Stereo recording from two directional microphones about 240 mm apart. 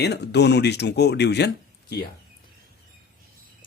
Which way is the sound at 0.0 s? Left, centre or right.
Left.